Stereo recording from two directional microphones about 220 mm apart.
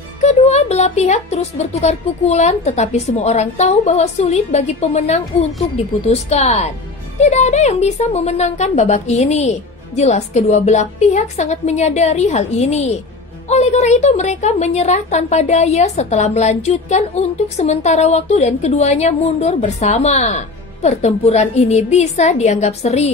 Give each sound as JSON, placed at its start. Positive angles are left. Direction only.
{"t": 0.2, "sound": "a woman's voice", "side_deg": 30}